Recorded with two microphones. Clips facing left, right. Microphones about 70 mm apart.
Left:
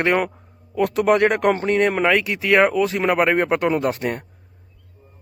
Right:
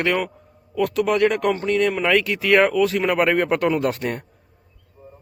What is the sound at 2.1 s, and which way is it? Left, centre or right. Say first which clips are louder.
A man's voice: even; centre.